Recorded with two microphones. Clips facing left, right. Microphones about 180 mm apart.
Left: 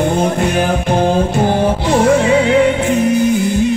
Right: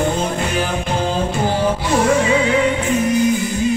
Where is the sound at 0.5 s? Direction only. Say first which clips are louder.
Left 6 dB; 60° left (ahead or behind).